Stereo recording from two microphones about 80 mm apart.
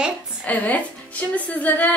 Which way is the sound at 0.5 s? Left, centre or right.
Centre.